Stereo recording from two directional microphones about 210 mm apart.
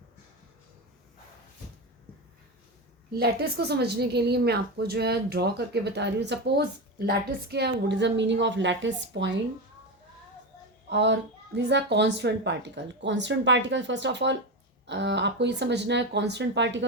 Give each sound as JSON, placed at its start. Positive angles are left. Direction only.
{"t": 3.2, "sound": "a woman's voice", "side_deg": -50}
{"t": 10.8, "sound": "speech", "side_deg": -55}